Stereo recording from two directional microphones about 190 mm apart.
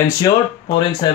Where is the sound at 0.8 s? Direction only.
25° left (ahead or behind).